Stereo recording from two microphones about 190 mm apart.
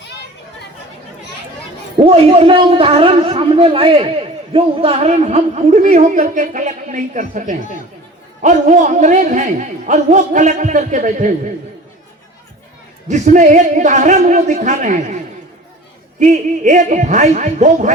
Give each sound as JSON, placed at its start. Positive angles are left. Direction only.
{"t": 2.0, "sound": "a man's voice", "side_deg": -30}
{"t": 13.1, "sound": "a man's voice", "side_deg": -40}